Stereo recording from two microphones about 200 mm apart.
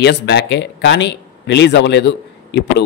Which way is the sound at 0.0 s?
55° left (ahead or behind).